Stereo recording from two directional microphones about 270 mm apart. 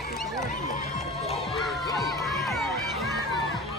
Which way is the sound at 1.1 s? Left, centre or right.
Left.